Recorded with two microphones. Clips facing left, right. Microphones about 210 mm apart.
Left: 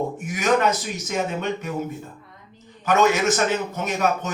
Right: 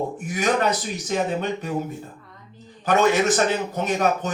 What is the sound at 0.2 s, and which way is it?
A man's voice, 35° right (ahead or behind).